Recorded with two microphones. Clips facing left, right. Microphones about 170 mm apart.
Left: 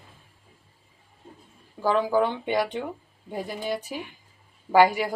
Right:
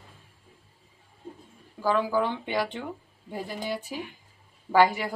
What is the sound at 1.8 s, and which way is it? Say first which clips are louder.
Speech: left 3 dB; 20° left (ahead or behind).